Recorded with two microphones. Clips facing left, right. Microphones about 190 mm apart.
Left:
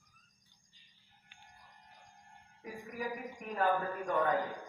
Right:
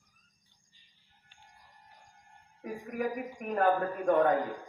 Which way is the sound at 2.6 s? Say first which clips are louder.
Right 7 dB; 55° right (ahead or behind).